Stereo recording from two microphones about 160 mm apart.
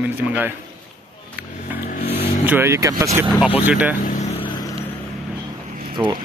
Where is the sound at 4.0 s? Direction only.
50° left (ahead or behind).